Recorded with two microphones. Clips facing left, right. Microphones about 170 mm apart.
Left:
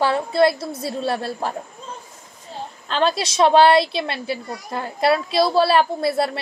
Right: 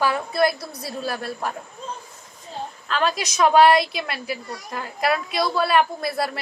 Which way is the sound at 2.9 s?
30° left (ahead or behind).